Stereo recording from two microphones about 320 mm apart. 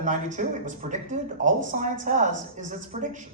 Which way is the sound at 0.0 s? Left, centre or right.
Right.